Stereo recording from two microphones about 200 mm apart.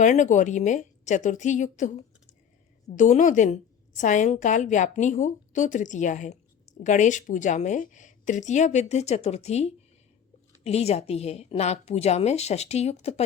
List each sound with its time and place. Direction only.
0.0 s a woman's voice: 35° left (ahead or behind)